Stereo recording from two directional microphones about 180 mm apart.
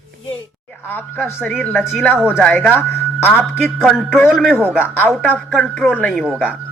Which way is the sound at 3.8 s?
Centre (ahead or behind).